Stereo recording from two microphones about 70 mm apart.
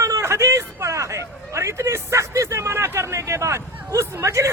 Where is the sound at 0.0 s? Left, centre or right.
Right.